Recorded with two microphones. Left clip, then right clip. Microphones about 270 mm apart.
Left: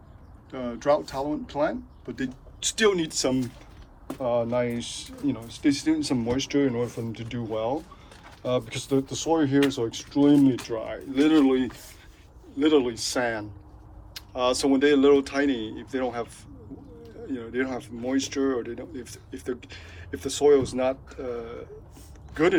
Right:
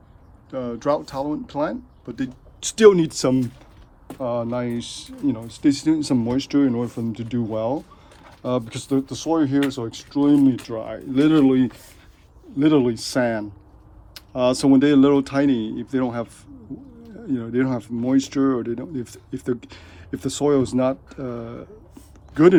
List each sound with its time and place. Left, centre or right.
0.5 s speech: centre
6.7 s speech: right
8.4 s speech: right
14.1 s tick-tock: right
14.6 s speech: right